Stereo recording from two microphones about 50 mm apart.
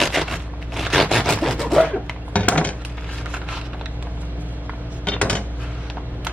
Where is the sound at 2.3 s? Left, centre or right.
Left.